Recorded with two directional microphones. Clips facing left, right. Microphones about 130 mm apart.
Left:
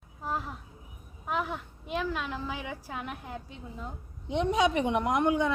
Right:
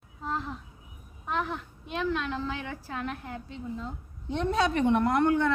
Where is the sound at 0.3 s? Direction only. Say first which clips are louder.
Right 1 dB; 10° left (ahead or behind).